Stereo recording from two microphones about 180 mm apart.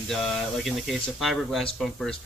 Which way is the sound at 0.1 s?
Centre (ahead or behind).